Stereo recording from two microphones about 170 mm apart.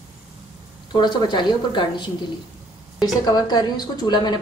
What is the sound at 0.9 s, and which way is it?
A woman's voice, 25° left (ahead or behind).